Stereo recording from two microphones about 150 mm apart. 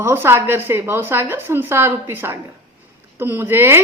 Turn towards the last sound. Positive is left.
turn(degrees=-15)  # may be behind; listen again after turning